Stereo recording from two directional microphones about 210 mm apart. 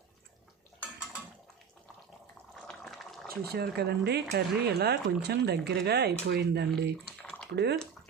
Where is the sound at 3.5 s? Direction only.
50° right (ahead or behind).